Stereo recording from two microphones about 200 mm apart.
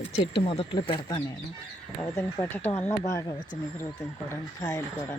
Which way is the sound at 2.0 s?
10° left (ahead or behind).